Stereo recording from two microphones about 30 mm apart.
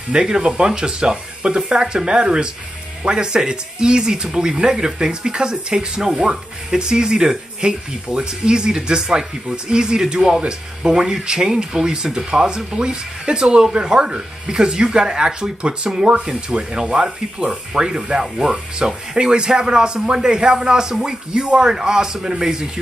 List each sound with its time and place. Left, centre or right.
0.1 s speech: right
18.2 s speech: centre
18.8 s speech: right